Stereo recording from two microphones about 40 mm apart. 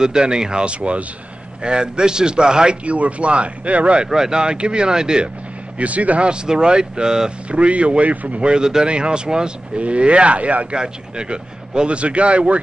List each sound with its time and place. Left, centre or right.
0.0 s a man's voice: centre
4.1 s a man's voice: centre
5.8 s speech: right
6.2 s a man's voice: right
7.4 s speech: right
8.4 s a man's voice: right
10.8 s a man's voice: right